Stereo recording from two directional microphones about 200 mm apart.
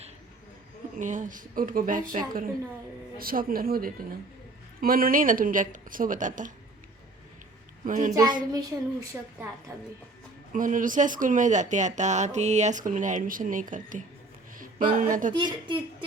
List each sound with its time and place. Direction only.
0.9 s a woman's voice: 40° right (ahead or behind)
7.9 s speech: 40° right (ahead or behind)
8.1 s a woman's voice: 20° right (ahead or behind)
10.5 s speech: 40° right (ahead or behind)
15.6 s a woman's voice: 25° right (ahead or behind)